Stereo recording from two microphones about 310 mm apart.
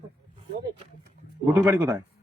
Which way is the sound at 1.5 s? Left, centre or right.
Centre.